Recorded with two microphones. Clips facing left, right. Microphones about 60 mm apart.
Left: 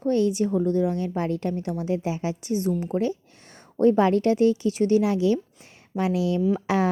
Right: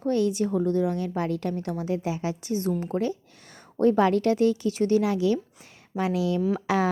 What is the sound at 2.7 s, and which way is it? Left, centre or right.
Speech, right.